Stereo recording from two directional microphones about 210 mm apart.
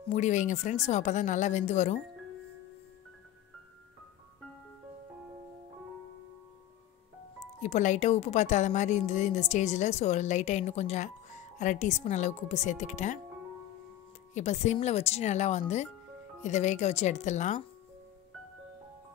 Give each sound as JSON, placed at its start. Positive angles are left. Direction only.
{"t": 0.1, "sound": "speech", "side_deg": 35}
{"t": 7.3, "sound": "speech", "side_deg": 35}
{"t": 14.3, "sound": "speech", "side_deg": 35}